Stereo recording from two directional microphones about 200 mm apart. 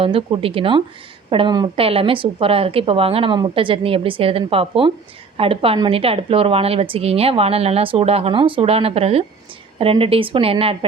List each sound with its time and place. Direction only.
0.0 s a woman's voice: 25° right (ahead or behind)